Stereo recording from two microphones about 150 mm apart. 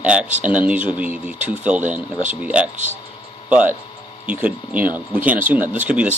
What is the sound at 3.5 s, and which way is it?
Speech, 10° right (ahead or behind).